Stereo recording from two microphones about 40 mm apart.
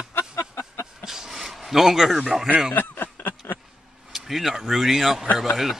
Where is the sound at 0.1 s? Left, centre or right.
Left.